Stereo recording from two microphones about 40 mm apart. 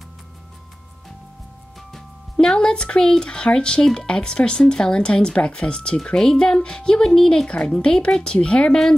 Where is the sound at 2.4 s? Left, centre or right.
Centre.